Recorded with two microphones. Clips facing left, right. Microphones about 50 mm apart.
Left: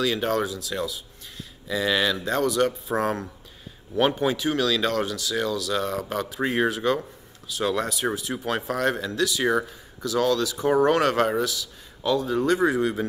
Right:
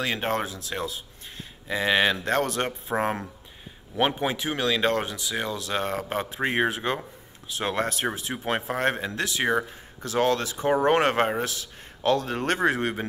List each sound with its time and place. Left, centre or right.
0.0 s speech: right
2.2 s speech: right
2.6 s speech: right
3.9 s speech: centre; by 11.7 s right
12.0 s speech: right